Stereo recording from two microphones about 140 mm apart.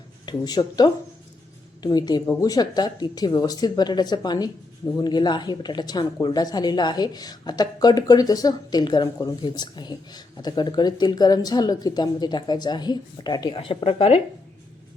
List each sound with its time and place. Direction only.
0.3 s speech: 30° left (ahead or behind)
13.6 s speech: 40° left (ahead or behind)